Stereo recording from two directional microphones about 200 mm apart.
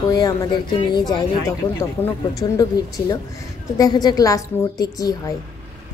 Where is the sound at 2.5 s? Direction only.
20° left (ahead or behind).